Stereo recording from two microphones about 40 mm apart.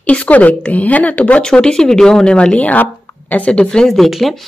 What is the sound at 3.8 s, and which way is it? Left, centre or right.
Speech, centre.